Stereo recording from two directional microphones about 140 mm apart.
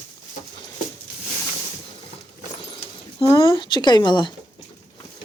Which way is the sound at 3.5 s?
35° left (ahead or behind).